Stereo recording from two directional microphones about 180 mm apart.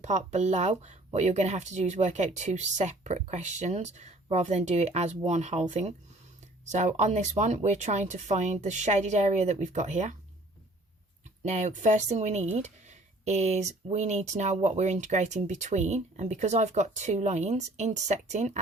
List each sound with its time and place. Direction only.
0.0 s speech: 40° right (ahead or behind)
11.4 s speech: 40° right (ahead or behind)